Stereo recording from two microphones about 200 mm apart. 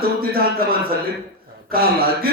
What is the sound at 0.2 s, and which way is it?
Speech, 50° right (ahead or behind).